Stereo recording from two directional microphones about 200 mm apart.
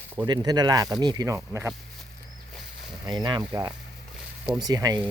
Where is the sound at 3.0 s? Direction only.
20° right (ahead or behind).